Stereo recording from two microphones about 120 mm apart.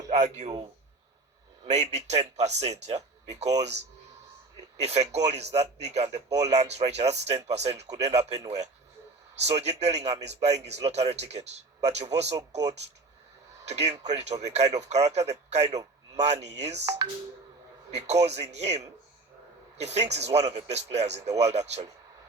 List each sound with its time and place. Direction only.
0.1 s speech: 75° right (ahead or behind)
1.6 s a man's voice: 70° right (ahead or behind)
4.8 s speech: 65° right (ahead or behind)
12.4 s speech: 30° right (ahead or behind)
13.7 s a man's voice: 65° right (ahead or behind)
17.9 s speech: 65° right (ahead or behind)